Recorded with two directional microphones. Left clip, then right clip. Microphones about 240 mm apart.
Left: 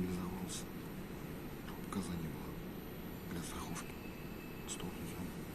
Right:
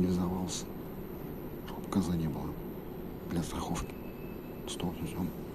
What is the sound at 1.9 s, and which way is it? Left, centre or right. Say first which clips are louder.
Speech: right 11 dB; centre.